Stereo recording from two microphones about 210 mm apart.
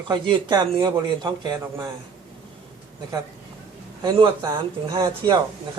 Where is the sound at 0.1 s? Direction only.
20° right (ahead or behind).